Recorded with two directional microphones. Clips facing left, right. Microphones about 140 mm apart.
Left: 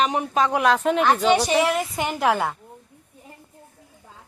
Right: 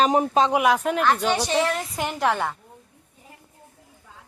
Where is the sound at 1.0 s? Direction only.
10° left (ahead or behind).